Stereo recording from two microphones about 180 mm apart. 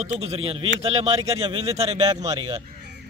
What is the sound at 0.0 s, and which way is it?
A man's voice, 35° right (ahead or behind).